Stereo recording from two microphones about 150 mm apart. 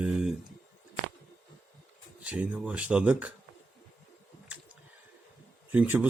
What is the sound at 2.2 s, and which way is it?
Speech, 10° right (ahead or behind).